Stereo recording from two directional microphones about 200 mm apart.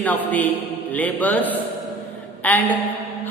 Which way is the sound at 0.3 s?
10° left (ahead or behind).